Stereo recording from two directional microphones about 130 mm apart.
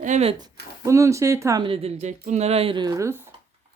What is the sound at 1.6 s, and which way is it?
Speech, 50° right (ahead or behind).